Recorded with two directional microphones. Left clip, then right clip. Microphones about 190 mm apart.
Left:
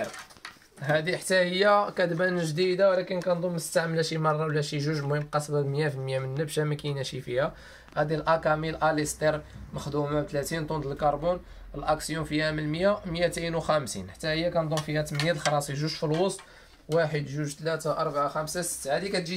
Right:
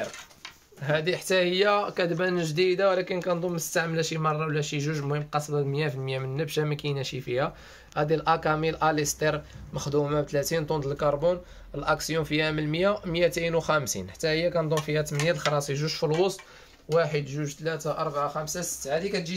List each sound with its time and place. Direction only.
0.8 s speech: 20° right (ahead or behind)
3.9 s speech: 5° right (ahead or behind); by 7.5 s 25° right (ahead or behind)
7.9 s speech: 40° right (ahead or behind)
16.9 s speech: 25° right (ahead or behind)
17.6 s speech: 10° right (ahead or behind)